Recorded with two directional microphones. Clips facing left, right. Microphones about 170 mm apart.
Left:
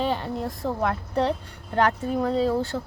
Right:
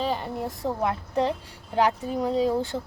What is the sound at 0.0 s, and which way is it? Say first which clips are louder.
Speech: left 2 dB; 5° right (ahead or behind).